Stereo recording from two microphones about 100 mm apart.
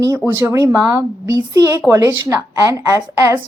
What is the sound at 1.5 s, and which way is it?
Speech, 30° right (ahead or behind).